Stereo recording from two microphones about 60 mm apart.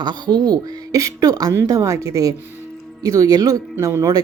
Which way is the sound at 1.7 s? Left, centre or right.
Right.